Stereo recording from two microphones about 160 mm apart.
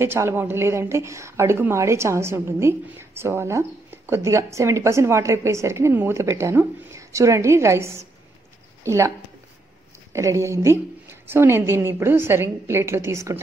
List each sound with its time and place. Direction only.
0.0 s a woman's voice: 15° right (ahead or behind)
10.1 s a woman's voice: 20° right (ahead or behind)